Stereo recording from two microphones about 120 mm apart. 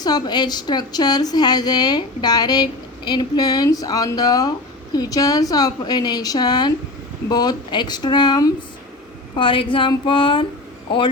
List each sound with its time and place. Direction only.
0.0 s a woman's voice: 35° left (ahead or behind)
9.3 s speech: 45° left (ahead or behind)